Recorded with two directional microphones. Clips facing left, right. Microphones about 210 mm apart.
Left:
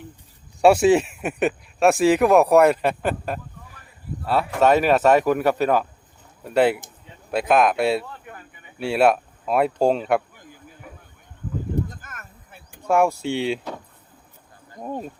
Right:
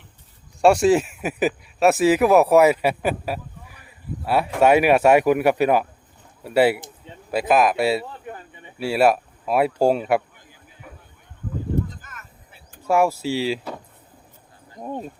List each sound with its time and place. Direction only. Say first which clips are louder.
0.6 s speech: left 1 dB; centre (ahead or behind)
8.0 s a sound: right 4 dB; 30° right (ahead or behind)
8.8 s speech: even; 5° right (ahead or behind)
12.0 s vehicle: left 2 dB; 50° left (ahead or behind)
12.9 s speech: even; 5° right (ahead or behind)
14.8 s speech: even; 5° left (ahead or behind)